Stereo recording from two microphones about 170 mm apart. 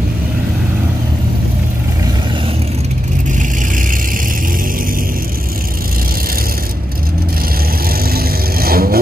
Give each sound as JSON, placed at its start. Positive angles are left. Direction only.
{"t": 8.0, "sound": "vehicle", "side_deg": -60}